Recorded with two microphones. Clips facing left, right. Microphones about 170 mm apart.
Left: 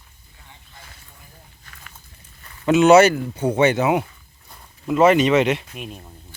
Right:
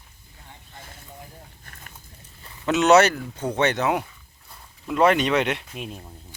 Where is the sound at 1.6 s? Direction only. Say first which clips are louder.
Even; 45° right (ahead or behind).